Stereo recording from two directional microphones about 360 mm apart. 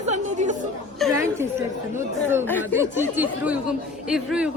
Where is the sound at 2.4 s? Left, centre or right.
Centre.